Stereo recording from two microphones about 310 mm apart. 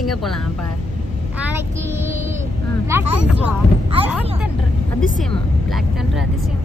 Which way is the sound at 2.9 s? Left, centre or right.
Centre.